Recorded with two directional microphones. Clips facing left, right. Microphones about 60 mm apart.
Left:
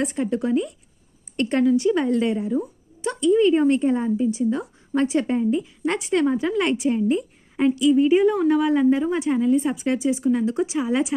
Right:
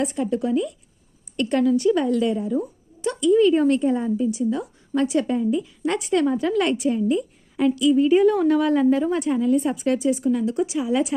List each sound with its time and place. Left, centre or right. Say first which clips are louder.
0.0 s a woman's voice: even; left
8.1 s a woman's voice: right 1 dB; centre; by 11.0 s left